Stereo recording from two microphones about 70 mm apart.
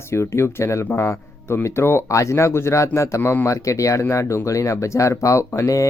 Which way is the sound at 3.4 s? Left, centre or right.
Left.